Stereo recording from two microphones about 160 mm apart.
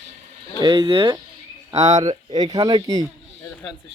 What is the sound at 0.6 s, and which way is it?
Speech, 25° right (ahead or behind).